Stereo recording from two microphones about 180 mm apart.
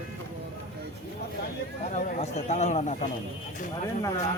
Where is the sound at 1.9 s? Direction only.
40° left (ahead or behind).